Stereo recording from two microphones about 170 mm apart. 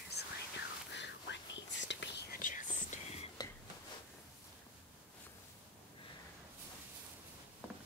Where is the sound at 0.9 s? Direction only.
90° left.